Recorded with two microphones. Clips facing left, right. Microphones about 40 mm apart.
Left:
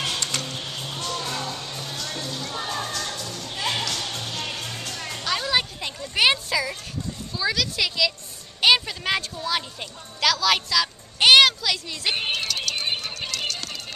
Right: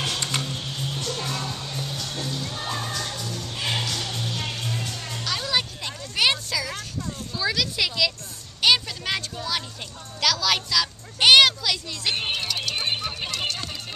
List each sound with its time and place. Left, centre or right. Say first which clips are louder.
0.2 s tick-tock: right 1 dB; centre
1.2 s music: even; centre
2.6 s crowd: left 1 dB; centre
2.9 s music: even; centre
5.2 s music: left 2 dB; centre
7.3 s a sound: left 1 dB; centre
8.5 s music: left 2 dB; centre